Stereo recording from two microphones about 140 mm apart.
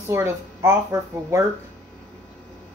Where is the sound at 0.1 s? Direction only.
20° right (ahead or behind).